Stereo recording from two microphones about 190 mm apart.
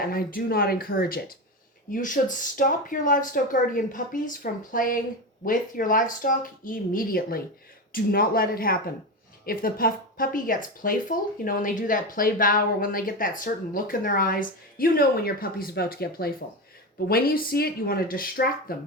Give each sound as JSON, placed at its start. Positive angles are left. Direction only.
{"t": 0.1, "sound": "speech", "side_deg": 50}